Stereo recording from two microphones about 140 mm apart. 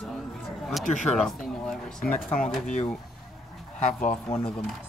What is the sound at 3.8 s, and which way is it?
Speech, 65° left (ahead or behind).